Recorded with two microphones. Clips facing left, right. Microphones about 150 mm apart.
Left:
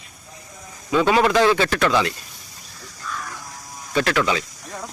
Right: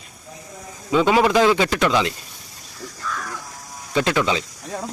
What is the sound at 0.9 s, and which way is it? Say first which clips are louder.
Speech: right 1 dB; 15° right (ahead or behind).